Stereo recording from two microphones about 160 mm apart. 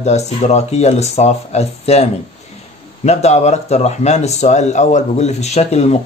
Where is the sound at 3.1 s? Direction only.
45° left (ahead or behind).